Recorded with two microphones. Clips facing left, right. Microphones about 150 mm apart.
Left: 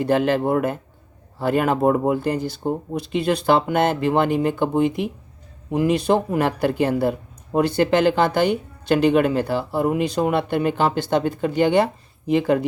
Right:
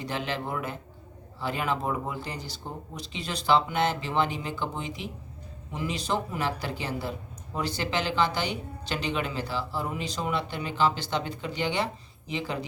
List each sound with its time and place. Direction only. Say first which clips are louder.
0.0 s speech: left 13 dB; 50° left (ahead or behind)